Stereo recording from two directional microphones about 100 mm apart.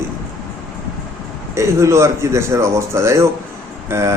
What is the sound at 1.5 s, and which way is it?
A man's voice, 30° right (ahead or behind).